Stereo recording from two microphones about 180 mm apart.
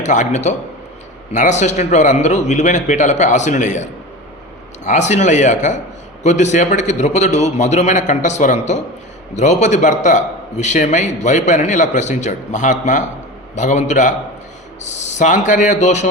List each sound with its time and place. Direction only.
0.0 s a man's voice: 40° left (ahead or behind)